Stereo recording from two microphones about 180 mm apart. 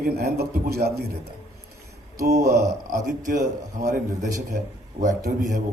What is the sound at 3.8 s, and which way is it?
A man's voice, 45° right (ahead or behind).